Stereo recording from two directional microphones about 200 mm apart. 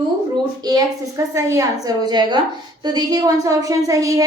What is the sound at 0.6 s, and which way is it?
A woman's voice, 20° right (ahead or behind).